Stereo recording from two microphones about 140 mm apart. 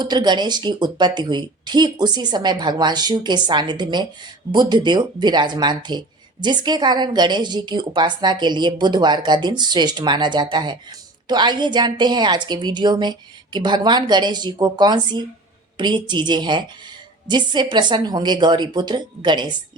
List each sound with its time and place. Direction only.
0.0 s a woman's voice: 30° right (ahead or behind)